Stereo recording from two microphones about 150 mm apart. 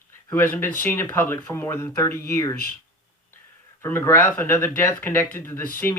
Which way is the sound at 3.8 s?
15° left (ahead or behind).